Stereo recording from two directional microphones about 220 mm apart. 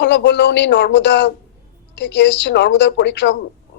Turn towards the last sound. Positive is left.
turn(degrees=50)  # may be behind; listen again after turning